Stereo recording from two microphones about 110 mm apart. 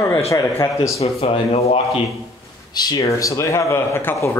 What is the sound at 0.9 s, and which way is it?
Speech, 65° left (ahead or behind).